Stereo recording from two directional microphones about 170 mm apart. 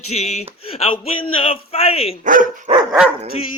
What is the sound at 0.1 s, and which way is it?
Speech, 40° left (ahead or behind).